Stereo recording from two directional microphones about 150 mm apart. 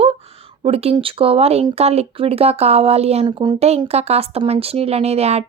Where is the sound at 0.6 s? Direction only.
40° right (ahead or behind).